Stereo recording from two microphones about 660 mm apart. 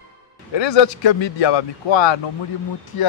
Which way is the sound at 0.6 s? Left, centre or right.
Left.